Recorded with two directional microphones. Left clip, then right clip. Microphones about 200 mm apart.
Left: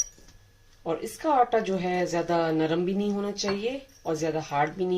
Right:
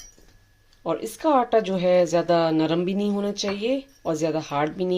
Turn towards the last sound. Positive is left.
turn(degrees=-50)  # may be behind; listen again after turning